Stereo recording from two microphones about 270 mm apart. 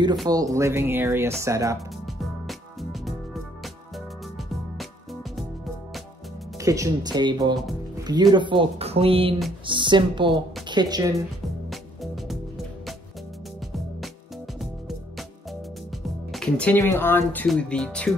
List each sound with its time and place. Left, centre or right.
0.3 s speech: centre
2.0 s music: centre
6.6 s speech: centre
11.7 s music: centre
14.6 s music: centre
16.3 s speech: centre